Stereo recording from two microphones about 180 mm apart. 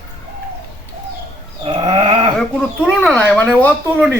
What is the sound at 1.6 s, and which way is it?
Sheep, 30° right (ahead or behind).